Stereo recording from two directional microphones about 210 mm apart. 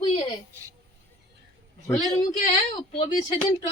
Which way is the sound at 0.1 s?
30° left (ahead or behind).